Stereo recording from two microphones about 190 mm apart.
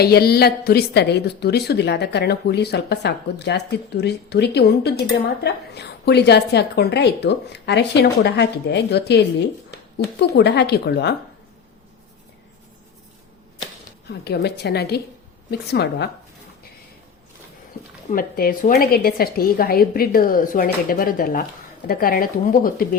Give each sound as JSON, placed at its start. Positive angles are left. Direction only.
{"t": 0.0, "sound": "a woman's voice", "side_deg": 55}
{"t": 14.1, "sound": "a woman's voice", "side_deg": 60}
{"t": 18.1, "sound": "a woman's voice", "side_deg": 50}